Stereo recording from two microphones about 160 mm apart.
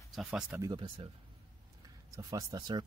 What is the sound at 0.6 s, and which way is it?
Speech, 30° right (ahead or behind).